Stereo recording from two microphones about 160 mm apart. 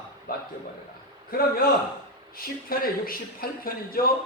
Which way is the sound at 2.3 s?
65° left (ahead or behind).